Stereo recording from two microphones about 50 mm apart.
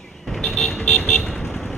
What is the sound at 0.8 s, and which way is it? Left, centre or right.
Vehicle, left.